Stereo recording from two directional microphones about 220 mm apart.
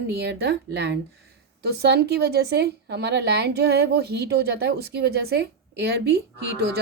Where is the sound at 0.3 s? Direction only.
50° right (ahead or behind).